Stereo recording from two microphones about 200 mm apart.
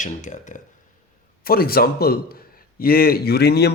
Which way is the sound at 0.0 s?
35° left (ahead or behind).